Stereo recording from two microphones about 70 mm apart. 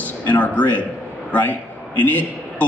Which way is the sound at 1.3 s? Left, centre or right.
Left.